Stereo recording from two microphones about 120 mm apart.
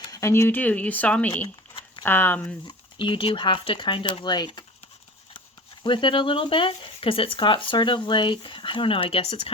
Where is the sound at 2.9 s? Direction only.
45° left (ahead or behind).